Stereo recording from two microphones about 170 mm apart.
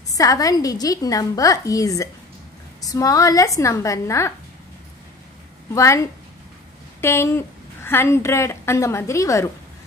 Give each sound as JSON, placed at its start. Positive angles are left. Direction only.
{"t": 0.1, "sound": "a woman's voice", "side_deg": 20}
{"t": 5.8, "sound": "a woman's voice", "side_deg": 15}